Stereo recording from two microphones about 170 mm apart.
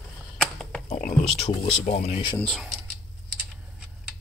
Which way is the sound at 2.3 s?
Centre (ahead or behind).